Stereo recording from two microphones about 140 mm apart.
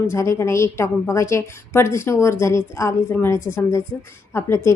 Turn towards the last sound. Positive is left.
turn(degrees=20)  # may be behind; listen again after turning